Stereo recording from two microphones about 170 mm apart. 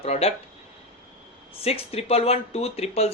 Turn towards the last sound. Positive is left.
turn(degrees=40)  # may be behind; listen again after turning